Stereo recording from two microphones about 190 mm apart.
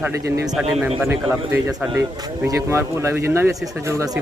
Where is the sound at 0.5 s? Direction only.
Centre (ahead or behind).